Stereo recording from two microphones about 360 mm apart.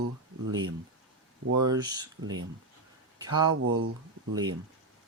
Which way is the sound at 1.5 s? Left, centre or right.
Right.